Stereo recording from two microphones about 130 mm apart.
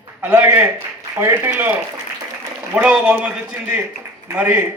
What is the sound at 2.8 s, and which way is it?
Speech, 10° right (ahead or behind).